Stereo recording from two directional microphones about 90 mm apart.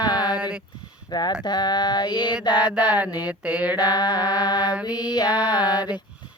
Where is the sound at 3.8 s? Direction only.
50° left (ahead or behind).